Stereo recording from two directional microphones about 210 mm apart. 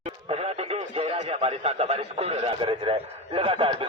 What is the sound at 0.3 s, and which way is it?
A man's voice, 30° right (ahead or behind).